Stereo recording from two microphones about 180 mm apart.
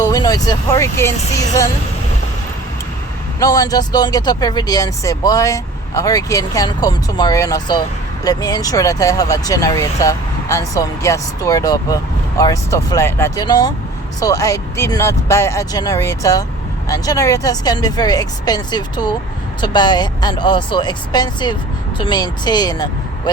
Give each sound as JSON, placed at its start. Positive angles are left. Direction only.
{"t": 0.0, "sound": "speech", "side_deg": 20}
{"t": 3.4, "sound": "speech", "side_deg": 20}